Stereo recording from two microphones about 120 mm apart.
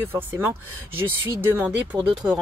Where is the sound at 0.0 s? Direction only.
20° right (ahead or behind).